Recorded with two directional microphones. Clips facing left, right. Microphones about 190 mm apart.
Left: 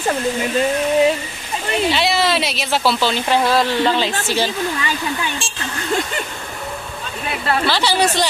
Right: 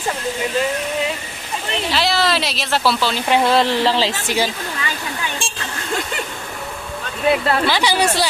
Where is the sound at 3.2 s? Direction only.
20° right (ahead or behind).